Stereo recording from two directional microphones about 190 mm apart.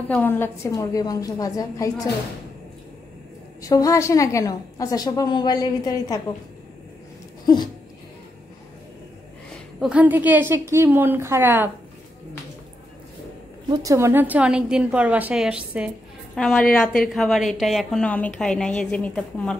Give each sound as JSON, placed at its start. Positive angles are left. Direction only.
{"t": 0.1, "sound": "a woman's voice", "side_deg": 10}
{"t": 3.6, "sound": "a woman's voice", "side_deg": 15}
{"t": 7.4, "sound": "a sound", "side_deg": 20}
{"t": 9.8, "sound": "a woman's voice", "side_deg": -5}
{"t": 13.7, "sound": "a woman's voice", "side_deg": -20}